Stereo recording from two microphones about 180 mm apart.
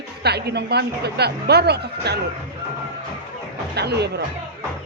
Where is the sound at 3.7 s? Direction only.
65° right (ahead or behind).